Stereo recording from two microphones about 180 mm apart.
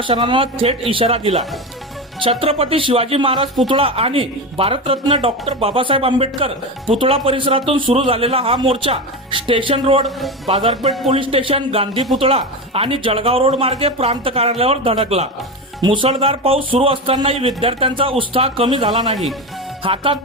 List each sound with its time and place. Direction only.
0.0 s speech: 30° right (ahead or behind)
10.2 s speech: centre (ahead or behind)
11.1 s speech: 30° right (ahead or behind)
18.9 s speech: centre (ahead or behind)
19.8 s speech: 30° right (ahead or behind)